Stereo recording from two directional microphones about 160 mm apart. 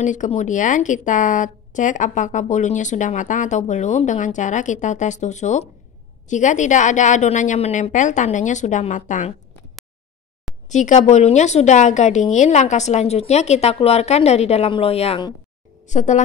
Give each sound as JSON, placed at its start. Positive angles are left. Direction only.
{"t": 0.0, "sound": "a woman's voice", "side_deg": 50}
{"t": 10.7, "sound": "a woman's voice", "side_deg": 50}